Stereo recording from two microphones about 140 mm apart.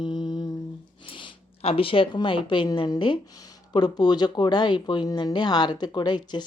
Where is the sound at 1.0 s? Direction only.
40° left (ahead or behind).